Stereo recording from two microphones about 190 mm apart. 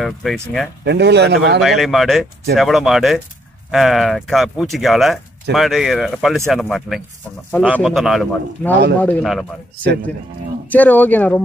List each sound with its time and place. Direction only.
0.0 s speech: centre (ahead or behind)
0.8 s a man's voice: 60° right (ahead or behind)
1.6 s speech: centre (ahead or behind)
10.7 s speech: 10° left (ahead or behind)